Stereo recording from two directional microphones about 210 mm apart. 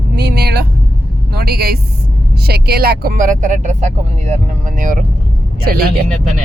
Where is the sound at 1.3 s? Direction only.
50° right (ahead or behind).